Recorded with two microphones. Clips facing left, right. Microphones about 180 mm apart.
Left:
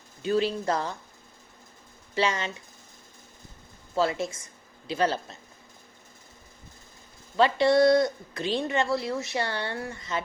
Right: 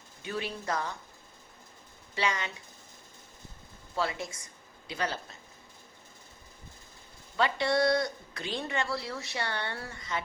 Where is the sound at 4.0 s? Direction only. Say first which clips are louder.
Left 7 dB; 25° left (ahead or behind).